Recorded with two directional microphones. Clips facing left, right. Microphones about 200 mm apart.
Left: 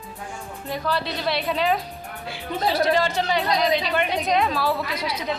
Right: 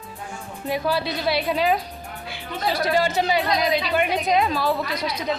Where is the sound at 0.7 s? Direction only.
5° right (ahead or behind).